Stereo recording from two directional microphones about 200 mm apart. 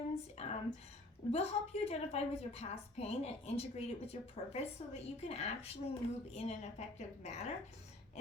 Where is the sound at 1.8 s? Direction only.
30° left (ahead or behind).